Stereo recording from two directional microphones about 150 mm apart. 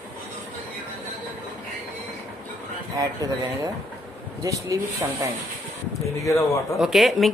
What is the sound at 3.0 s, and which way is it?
Speech, 25° right (ahead or behind).